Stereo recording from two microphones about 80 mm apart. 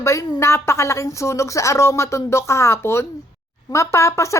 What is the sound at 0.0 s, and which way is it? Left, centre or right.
A woman's voice, left.